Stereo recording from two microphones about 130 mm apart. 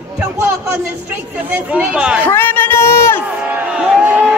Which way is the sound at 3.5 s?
10° right (ahead or behind).